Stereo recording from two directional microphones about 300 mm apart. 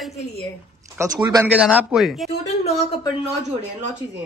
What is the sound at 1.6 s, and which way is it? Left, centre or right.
Speech, centre.